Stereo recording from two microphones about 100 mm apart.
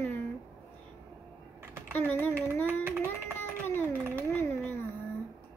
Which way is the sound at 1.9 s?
15° left (ahead or behind).